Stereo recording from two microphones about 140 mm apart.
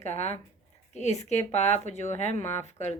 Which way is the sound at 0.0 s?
50° left (ahead or behind).